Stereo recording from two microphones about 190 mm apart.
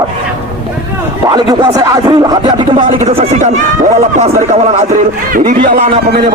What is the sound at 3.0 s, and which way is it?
Speech, 40° right (ahead or behind).